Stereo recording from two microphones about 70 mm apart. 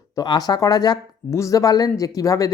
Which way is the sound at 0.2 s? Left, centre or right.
Left.